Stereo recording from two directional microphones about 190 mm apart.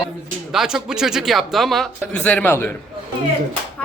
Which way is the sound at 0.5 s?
5° right (ahead or behind).